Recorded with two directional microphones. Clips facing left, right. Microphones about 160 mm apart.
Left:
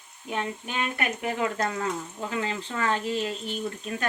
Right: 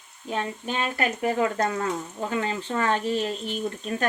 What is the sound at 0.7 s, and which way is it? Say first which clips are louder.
Speech: right 3 dB; 30° right (ahead or behind).